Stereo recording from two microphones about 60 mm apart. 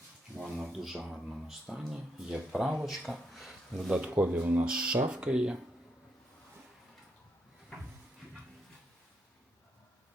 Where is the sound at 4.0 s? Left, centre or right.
Right.